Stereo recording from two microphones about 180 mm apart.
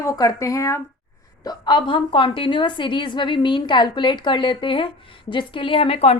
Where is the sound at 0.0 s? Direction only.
20° left (ahead or behind).